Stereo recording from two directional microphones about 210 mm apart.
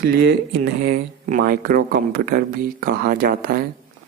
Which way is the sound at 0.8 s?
40° right (ahead or behind).